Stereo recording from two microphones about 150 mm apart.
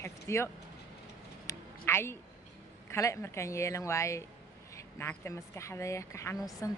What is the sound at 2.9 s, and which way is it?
Speech, 20° left (ahead or behind).